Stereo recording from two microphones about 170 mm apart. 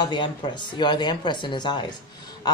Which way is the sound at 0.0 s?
25° left (ahead or behind).